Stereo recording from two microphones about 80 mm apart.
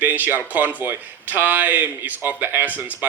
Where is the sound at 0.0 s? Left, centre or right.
Right.